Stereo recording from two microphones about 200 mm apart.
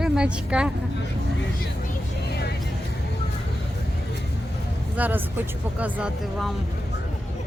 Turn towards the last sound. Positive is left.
turn(degrees=0)  # may be behind; listen again after turning